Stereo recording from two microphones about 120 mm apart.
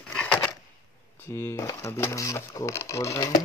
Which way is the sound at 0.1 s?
10° left (ahead or behind).